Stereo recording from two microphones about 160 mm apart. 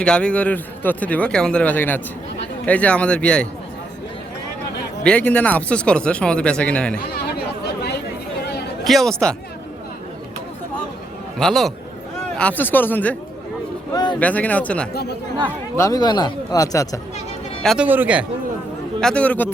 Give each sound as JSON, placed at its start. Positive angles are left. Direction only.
{"t": 0.0, "sound": "a man's voice", "side_deg": 5}
{"t": 5.0, "sound": "a man's voice", "side_deg": 10}
{"t": 7.1, "sound": "chatter", "side_deg": 85}
{"t": 8.8, "sound": "speech", "side_deg": 0}
{"t": 11.3, "sound": "a man's voice", "side_deg": 0}
{"t": 13.9, "sound": "a sound", "side_deg": 25}
{"t": 14.2, "sound": "a man's voice", "side_deg": 10}
{"t": 15.8, "sound": "speech", "side_deg": 25}
{"t": 17.6, "sound": "speech", "side_deg": 0}
{"t": 17.8, "sound": "speech", "side_deg": -10}
{"t": 18.9, "sound": "a man's voice", "side_deg": 5}